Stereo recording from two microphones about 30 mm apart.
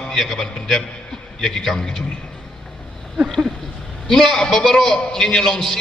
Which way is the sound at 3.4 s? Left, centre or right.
Centre.